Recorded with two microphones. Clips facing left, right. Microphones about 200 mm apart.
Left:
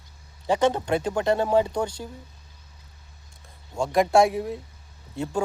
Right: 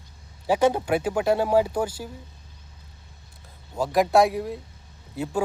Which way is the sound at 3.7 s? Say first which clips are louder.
Even; 5° right (ahead or behind).